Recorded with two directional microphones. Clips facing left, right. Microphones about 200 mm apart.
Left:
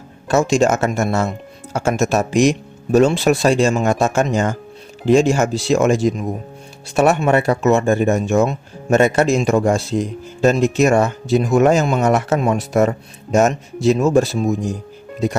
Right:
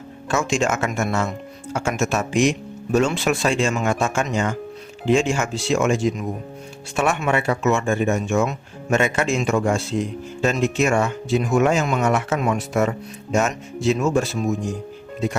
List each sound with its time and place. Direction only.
0.3 s speech: 35° left (ahead or behind)